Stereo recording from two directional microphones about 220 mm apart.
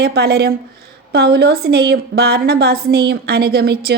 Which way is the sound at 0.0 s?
45° right (ahead or behind).